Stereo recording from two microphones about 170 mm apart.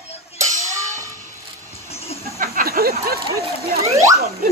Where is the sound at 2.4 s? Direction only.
60° right (ahead or behind).